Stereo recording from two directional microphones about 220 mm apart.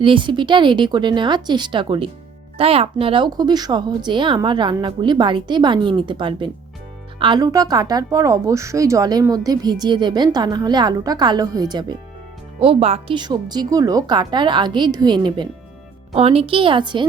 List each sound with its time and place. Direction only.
0.0 s speech: 20° right (ahead or behind)